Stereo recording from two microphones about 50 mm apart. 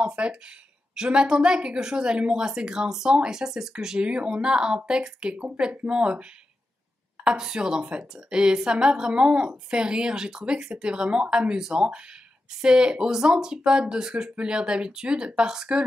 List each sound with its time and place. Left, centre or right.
0.0 s speech: right
7.2 s speech: centre